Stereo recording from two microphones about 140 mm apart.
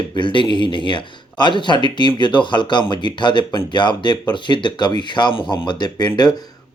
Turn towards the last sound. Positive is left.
turn(degrees=30)  # may be behind; listen again after turning